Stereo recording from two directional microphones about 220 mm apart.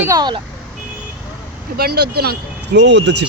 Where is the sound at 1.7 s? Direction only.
45° right (ahead or behind).